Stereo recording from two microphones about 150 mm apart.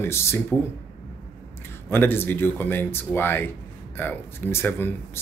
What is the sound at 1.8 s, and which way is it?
Speech, 15° left (ahead or behind).